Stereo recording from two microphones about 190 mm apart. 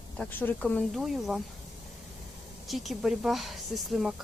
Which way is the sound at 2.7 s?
Centre (ahead or behind).